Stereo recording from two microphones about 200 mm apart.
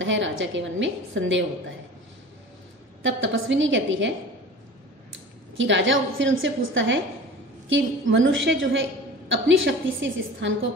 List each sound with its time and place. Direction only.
0.0 s a woman's voice: 70° right (ahead or behind)
3.0 s a woman's voice: 70° right (ahead or behind)
5.6 s a woman's voice: 70° right (ahead or behind)